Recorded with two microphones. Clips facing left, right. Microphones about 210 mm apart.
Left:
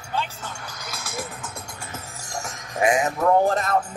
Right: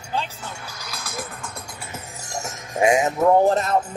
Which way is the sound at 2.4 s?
25° right (ahead or behind).